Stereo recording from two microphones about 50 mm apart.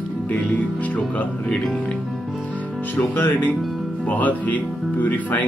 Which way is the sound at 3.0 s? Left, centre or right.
Left.